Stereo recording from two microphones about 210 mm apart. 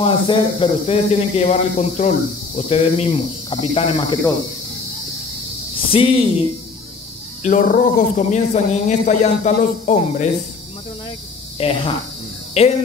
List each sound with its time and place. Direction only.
0.0 s speech: 25° left (ahead or behind)
5.9 s speech: 25° left (ahead or behind)
7.4 s speech: 40° left (ahead or behind)
11.5 s speech: 30° left (ahead or behind)